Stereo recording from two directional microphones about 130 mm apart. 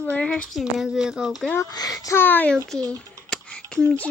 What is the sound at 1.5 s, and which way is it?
Speech, 25° left (ahead or behind).